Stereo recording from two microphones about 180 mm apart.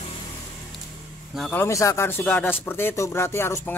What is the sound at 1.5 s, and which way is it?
Speech, 15° left (ahead or behind).